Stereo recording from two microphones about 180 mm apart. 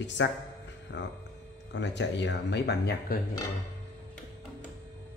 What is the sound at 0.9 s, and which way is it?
Speech, 75° left (ahead or behind).